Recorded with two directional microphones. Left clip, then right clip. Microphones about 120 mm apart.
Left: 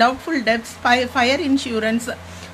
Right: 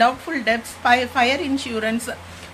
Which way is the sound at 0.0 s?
35° left (ahead or behind).